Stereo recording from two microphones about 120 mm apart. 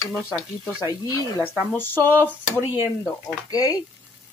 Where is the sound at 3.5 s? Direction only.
30° left (ahead or behind).